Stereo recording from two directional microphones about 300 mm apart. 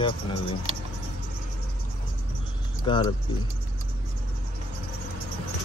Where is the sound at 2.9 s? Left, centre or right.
Centre.